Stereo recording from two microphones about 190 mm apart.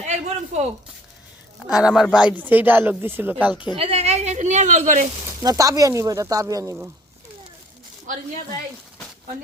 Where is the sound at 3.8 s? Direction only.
30° right (ahead or behind).